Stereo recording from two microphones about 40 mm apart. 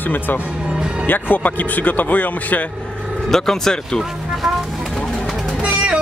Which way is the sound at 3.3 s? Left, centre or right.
Centre.